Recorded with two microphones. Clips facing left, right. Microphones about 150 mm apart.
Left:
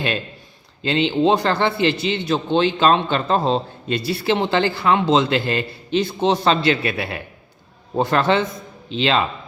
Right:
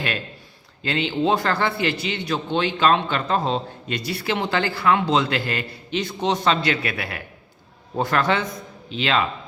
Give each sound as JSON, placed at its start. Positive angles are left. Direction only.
{"t": 0.8, "sound": "a man's voice", "side_deg": 25}